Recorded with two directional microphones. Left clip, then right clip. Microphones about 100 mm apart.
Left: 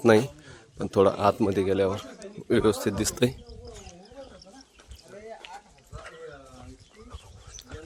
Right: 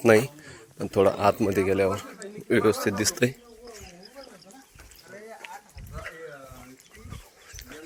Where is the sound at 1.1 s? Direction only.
30° left (ahead or behind).